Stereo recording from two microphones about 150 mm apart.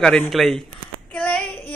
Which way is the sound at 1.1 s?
5° left (ahead or behind).